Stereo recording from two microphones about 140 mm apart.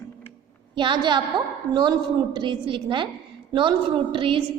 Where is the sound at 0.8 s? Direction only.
35° right (ahead or behind).